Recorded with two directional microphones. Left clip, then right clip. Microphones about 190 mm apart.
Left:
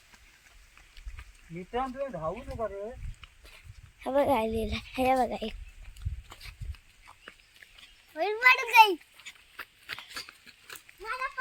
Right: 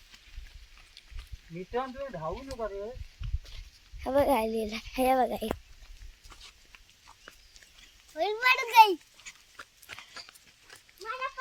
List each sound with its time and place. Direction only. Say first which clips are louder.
1.7 s speech: left 2 dB; 20° left (ahead or behind)
4.0 s a child's voice: even; 5° right (ahead or behind)
8.1 s a sound: left 3 dB; 10° right (ahead or behind)
10.7 s goat: left 2 dB; 55° left (ahead or behind)